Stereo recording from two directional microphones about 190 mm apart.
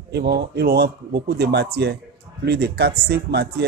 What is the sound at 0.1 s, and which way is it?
A man's voice, 60° right (ahead or behind).